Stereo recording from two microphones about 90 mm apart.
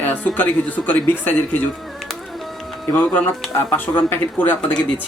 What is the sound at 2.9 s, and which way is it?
Speech, 20° left (ahead or behind).